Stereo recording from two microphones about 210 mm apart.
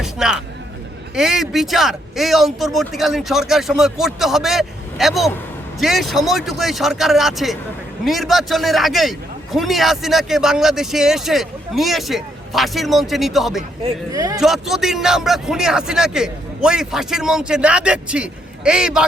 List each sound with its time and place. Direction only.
0.0 s a sound: 5° right (ahead or behind)
1.1 s a man's voice: centre (ahead or behind)
14.1 s speech: 15° right (ahead or behind)
14.3 s a man's voice: centre (ahead or behind)